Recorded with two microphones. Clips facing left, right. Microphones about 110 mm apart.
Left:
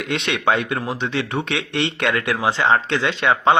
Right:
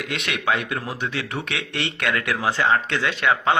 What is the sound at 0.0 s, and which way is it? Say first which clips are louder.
Speech: left 5 dB; 30° left (ahead or behind).